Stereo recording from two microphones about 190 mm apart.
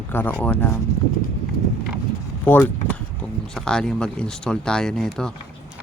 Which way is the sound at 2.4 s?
10° left (ahead or behind).